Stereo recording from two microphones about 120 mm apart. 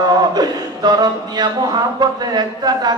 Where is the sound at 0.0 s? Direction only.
35° right (ahead or behind).